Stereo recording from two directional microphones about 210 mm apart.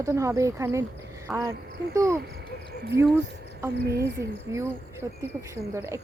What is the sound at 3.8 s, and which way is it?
Speech, 50° right (ahead or behind).